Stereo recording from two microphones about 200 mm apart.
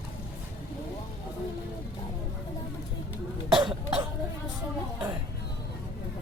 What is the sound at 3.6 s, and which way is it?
Cough, 25° right (ahead or behind).